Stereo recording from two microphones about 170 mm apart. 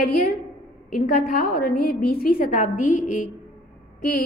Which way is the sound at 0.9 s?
55° left (ahead or behind).